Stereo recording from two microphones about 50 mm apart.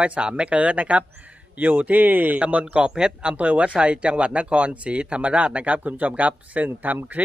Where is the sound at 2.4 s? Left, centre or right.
Right.